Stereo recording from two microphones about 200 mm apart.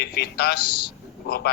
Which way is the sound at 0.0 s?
50° left (ahead or behind).